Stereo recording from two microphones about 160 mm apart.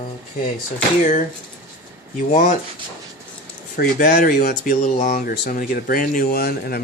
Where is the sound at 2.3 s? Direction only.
50° left (ahead or behind).